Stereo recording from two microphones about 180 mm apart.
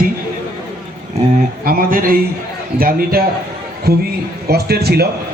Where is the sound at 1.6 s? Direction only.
50° right (ahead or behind).